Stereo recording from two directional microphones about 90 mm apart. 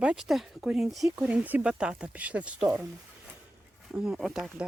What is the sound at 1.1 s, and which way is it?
Speech, 15° right (ahead or behind).